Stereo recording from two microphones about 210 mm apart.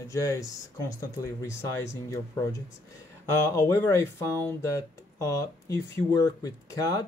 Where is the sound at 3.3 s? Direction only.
10° left (ahead or behind).